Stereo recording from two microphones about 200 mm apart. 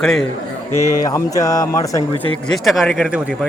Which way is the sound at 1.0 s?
15° left (ahead or behind).